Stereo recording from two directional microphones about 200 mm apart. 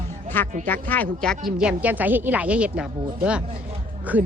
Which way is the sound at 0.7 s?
10° left (ahead or behind).